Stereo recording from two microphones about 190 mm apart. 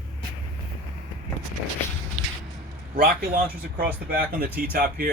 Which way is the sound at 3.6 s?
55° right (ahead or behind).